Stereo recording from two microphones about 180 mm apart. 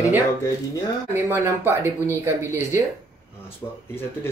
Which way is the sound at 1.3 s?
15° right (ahead or behind).